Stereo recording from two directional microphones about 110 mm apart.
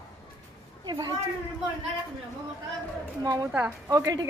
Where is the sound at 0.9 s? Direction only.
40° right (ahead or behind).